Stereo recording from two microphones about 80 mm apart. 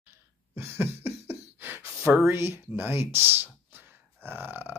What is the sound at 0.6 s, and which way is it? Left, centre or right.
Beatboxing, right.